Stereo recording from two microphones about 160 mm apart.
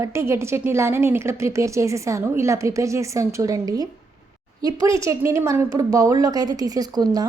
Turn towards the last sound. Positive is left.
turn(degrees=-25)  # may be behind; listen again after turning